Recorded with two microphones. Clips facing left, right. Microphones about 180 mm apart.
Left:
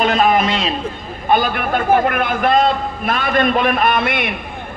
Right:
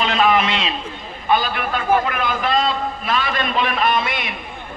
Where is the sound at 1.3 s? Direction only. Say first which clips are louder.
Left 3 dB; 50° left (ahead or behind).